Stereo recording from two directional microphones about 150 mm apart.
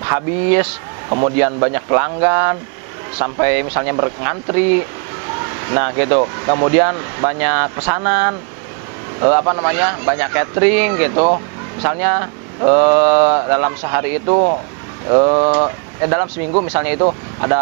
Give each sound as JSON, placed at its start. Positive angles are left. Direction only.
{"t": 0.0, "sound": "speech", "side_deg": -15}
{"t": 14.3, "sound": "speech", "side_deg": -30}
{"t": 17.0, "sound": "speech", "side_deg": -25}